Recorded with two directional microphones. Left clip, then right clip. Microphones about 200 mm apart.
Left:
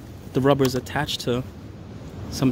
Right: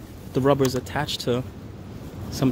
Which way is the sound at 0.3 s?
20° left (ahead or behind).